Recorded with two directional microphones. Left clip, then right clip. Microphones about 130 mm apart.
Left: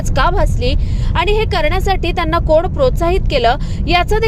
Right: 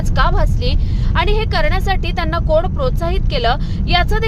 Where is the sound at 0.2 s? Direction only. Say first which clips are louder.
Left 3 dB; 30° left (ahead or behind).